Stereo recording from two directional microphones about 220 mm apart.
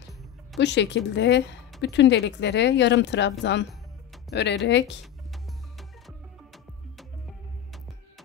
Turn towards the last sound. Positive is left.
turn(degrees=0)  # may be behind; listen again after turning